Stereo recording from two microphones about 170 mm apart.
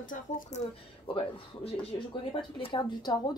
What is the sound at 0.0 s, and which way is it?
Speech, 50° left (ahead or behind).